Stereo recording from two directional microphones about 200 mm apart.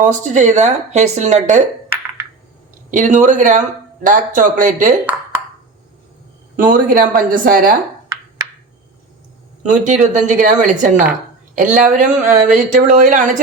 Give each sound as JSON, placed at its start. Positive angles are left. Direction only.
{"t": 0.0, "sound": "speech", "side_deg": -35}
{"t": 2.9, "sound": "speech", "side_deg": -40}
{"t": 6.6, "sound": "speech", "side_deg": -45}
{"t": 9.6, "sound": "speech", "side_deg": -40}